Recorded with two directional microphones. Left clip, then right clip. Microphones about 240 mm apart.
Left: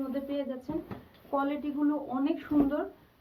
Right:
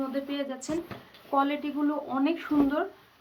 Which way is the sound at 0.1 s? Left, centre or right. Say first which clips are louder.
Right 2 dB; right.